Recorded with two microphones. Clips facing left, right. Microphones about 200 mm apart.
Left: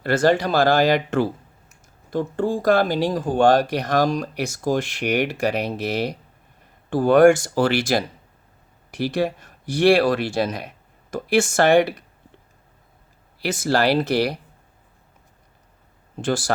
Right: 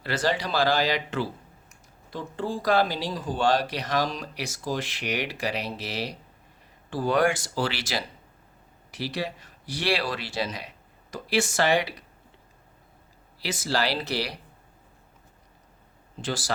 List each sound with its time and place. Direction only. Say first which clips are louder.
0.0 s speech: left 9 dB; 50° left (ahead or behind)
13.4 s speech: left 7 dB; 50° left (ahead or behind)
16.1 s speech: left 8 dB; 50° left (ahead or behind)